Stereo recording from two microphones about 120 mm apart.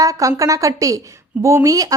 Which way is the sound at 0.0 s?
25° right (ahead or behind).